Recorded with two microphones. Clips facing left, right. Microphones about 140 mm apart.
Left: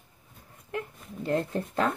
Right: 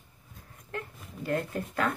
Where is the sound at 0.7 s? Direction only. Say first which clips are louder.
Left 4 dB; 25° left (ahead or behind).